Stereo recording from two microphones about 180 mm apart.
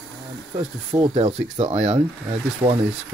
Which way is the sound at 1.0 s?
30° right (ahead or behind).